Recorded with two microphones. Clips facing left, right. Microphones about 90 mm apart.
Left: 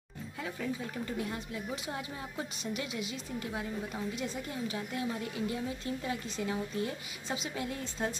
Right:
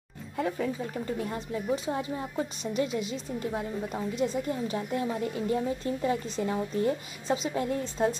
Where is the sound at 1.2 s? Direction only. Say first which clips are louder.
Right 6 dB; 40° right (ahead or behind).